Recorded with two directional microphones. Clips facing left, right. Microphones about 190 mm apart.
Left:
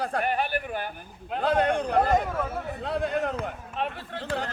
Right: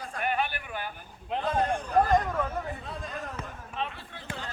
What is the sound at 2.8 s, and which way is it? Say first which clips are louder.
Speech: left 11 dB; 70° left (ahead or behind).